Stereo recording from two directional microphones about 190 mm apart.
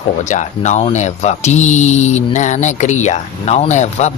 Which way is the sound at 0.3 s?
40° left (ahead or behind).